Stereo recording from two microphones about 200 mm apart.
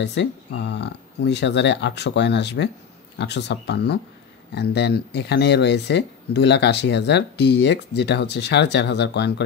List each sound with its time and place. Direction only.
0.0 s speech: 60° left (ahead or behind)